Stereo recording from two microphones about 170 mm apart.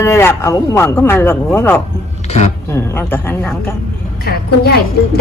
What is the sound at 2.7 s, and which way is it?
Speech, 15° left (ahead or behind).